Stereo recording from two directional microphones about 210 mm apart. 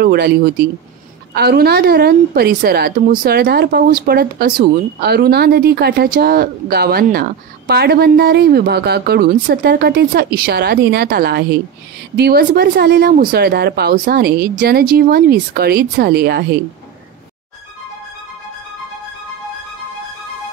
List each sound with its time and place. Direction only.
0.0 s a woman's voice: 50° right (ahead or behind)